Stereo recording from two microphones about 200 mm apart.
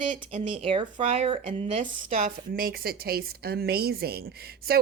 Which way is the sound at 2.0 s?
45° right (ahead or behind).